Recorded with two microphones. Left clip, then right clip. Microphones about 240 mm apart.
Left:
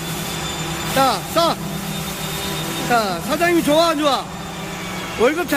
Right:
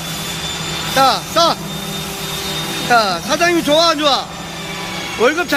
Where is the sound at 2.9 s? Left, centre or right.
Centre.